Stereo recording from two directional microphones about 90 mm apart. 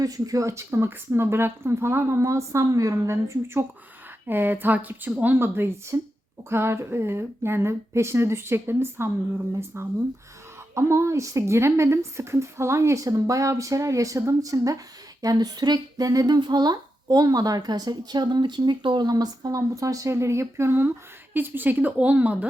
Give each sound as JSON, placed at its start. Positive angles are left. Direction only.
{"t": 0.0, "sound": "a woman's voice", "side_deg": -40}
{"t": 19.1, "sound": "a woman's voice", "side_deg": -45}